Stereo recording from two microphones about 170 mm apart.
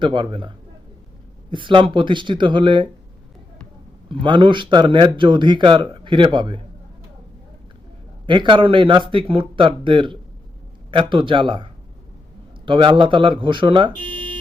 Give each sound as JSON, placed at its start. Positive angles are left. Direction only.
{"t": 0.0, "sound": "speech", "side_deg": -30}
{"t": 4.1, "sound": "speech", "side_deg": -30}
{"t": 8.3, "sound": "speech", "side_deg": -30}